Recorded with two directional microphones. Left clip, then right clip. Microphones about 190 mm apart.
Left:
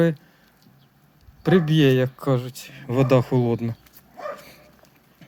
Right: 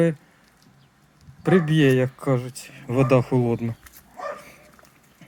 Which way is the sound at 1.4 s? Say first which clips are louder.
Even; 20° left (ahead or behind).